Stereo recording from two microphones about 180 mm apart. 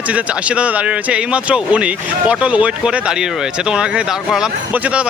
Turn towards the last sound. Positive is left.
turn(degrees=-5)  # may be behind; listen again after turning